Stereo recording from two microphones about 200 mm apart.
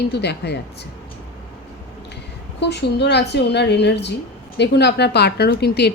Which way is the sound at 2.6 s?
55° left (ahead or behind).